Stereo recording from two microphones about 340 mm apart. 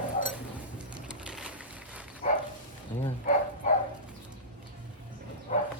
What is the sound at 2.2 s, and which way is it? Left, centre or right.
Dog, left.